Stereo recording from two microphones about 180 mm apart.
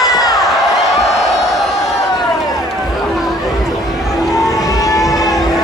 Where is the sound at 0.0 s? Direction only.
20° left (ahead or behind).